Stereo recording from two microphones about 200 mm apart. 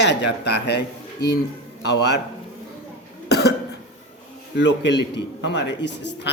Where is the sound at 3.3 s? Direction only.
55° left (ahead or behind).